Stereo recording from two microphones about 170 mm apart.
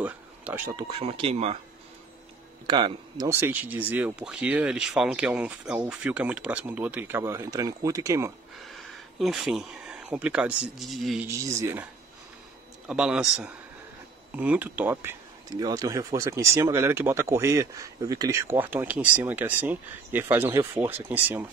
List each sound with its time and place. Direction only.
0.0 s a sound: 10° right (ahead or behind)
0.7 s speech: 30° right (ahead or behind)
2.6 s speech: 25° right (ahead or behind)
3.3 s speech: 15° right (ahead or behind)
9.2 s speech: centre (ahead or behind)
11.2 s speech: 15° right (ahead or behind)